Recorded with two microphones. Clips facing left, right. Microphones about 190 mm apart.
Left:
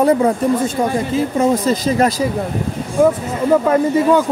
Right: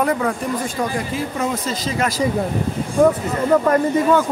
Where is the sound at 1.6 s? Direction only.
50° left (ahead or behind).